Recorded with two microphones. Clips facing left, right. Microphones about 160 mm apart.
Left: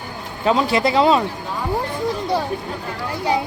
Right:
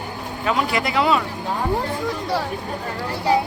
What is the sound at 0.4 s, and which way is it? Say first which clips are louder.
Speech: left 5 dB; 30° left (ahead or behind).